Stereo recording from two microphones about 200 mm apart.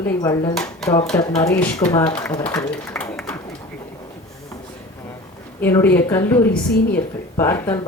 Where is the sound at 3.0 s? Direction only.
5° left (ahead or behind).